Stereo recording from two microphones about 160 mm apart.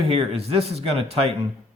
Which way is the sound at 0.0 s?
40° right (ahead or behind).